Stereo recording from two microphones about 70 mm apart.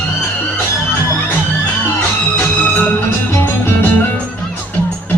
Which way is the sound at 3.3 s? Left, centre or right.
Left.